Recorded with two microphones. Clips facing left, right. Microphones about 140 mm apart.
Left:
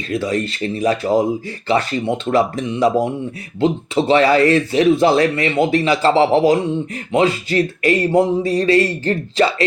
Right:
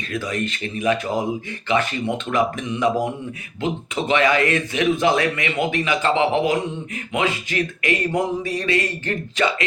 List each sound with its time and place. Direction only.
0.1 s speech: 30° left (ahead or behind)